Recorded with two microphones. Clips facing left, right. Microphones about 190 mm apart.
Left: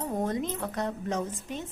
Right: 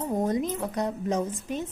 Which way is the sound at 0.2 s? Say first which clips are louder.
Right 4 dB; 20° right (ahead or behind).